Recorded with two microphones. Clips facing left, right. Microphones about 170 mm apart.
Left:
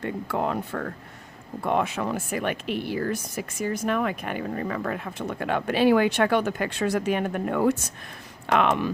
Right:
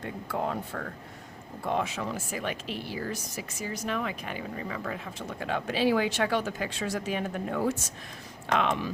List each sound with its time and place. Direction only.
0.0 s speech: 65° left (ahead or behind)